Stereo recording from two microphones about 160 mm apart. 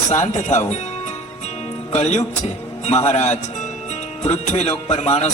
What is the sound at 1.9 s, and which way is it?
A man's voice, 45° left (ahead or behind).